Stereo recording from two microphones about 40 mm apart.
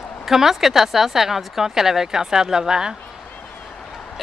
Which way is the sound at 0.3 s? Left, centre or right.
Centre.